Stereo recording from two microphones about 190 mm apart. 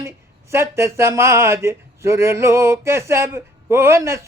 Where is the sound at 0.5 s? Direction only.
15° right (ahead or behind).